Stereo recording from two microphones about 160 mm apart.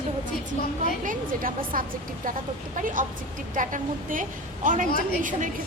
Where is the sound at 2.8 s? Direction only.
55° right (ahead or behind).